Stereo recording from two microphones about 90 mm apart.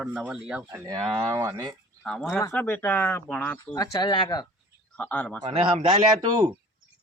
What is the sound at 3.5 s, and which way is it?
Speech, 45° left (ahead or behind).